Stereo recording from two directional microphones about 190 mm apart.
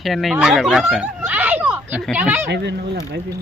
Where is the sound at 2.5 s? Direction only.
60° right (ahead or behind).